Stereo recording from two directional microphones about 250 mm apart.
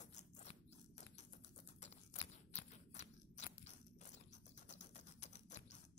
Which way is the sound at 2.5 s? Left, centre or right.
Left.